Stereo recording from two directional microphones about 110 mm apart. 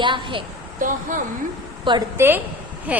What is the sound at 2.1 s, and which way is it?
Speech, 20° right (ahead or behind).